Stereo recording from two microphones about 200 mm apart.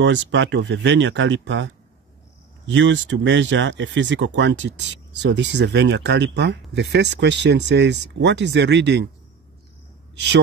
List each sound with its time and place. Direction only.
0.0 s speech: 65° right (ahead or behind)
10.1 s a man's voice: 60° right (ahead or behind)